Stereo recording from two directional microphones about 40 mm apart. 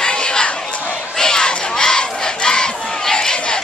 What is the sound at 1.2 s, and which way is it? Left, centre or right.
Battle cry, centre.